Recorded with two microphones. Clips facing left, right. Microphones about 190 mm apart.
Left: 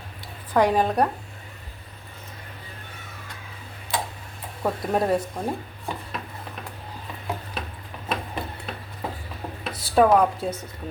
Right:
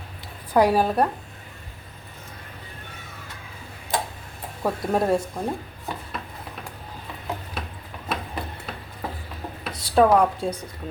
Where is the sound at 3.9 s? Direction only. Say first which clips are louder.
Right 2 dB; 45° right (ahead or behind).